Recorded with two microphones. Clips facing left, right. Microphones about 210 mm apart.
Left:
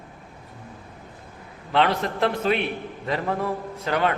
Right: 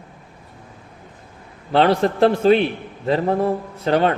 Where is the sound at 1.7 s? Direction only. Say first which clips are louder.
Right 6 dB; 35° right (ahead or behind).